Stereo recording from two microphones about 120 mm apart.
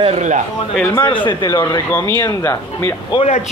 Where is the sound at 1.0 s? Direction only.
45° left (ahead or behind).